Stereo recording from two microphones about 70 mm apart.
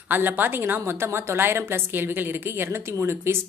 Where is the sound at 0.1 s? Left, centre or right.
Right.